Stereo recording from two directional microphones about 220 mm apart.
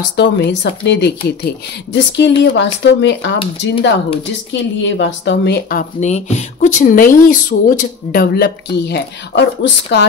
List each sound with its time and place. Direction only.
0.1 s speech: 50° left (ahead or behind)